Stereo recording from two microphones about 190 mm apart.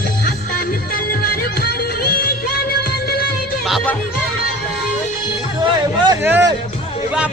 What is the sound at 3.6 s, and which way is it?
Music, 5° left (ahead or behind).